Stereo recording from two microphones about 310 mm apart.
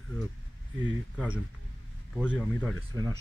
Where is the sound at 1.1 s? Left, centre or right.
Centre.